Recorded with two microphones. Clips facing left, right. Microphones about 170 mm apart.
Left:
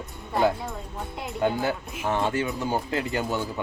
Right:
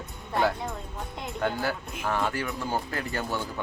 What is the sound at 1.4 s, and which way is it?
Speech, 20° left (ahead or behind).